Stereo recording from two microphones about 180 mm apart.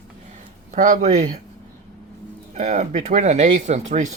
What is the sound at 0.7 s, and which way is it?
Speech, 45° right (ahead or behind).